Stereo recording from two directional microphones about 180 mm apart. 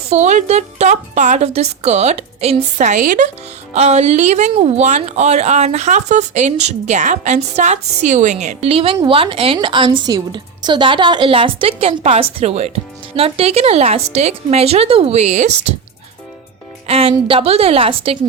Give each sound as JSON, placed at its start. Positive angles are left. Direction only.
{"t": 0.1, "sound": "a woman's voice", "side_deg": -40}
{"t": 16.8, "sound": "a woman's voice", "side_deg": -35}